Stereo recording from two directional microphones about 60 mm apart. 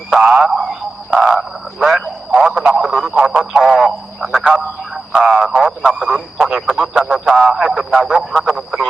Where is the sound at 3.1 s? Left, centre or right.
Centre.